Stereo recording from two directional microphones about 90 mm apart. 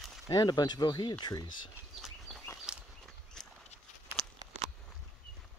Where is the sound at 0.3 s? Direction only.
45° left (ahead or behind).